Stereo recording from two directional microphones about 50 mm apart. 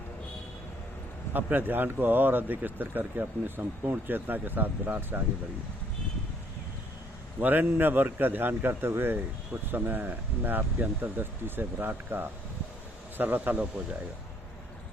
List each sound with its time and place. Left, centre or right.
1.3 s speech: right
7.3 s speech: right